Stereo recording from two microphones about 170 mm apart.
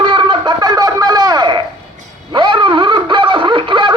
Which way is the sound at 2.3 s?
30° right (ahead or behind).